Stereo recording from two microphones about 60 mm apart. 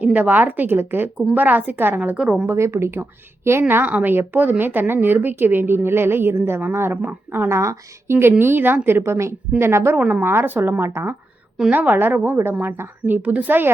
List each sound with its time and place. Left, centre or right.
0.0 s a woman's voice: right
2.0 s a woman's voice: centre
2.5 s a woman's voice: right